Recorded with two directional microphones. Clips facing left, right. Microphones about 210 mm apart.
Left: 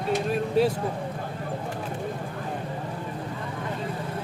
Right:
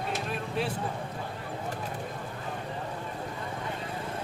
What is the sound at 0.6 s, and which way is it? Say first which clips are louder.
Vehicle: left 10 dB; 40° left (ahead or behind).